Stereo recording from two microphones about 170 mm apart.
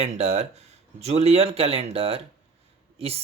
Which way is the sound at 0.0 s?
40° right (ahead or behind).